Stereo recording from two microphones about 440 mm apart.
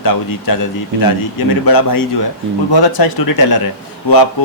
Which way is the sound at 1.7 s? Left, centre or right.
Left.